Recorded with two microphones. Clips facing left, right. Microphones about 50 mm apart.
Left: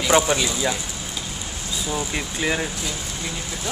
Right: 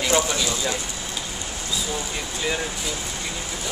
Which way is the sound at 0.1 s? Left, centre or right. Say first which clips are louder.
Left 4 dB; left.